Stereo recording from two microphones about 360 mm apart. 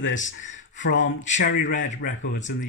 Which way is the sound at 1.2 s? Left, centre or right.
Left.